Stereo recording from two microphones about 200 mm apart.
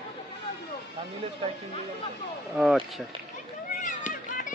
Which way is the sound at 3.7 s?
40° left (ahead or behind).